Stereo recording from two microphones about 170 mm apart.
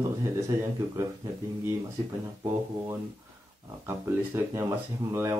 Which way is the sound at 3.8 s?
15° right (ahead or behind).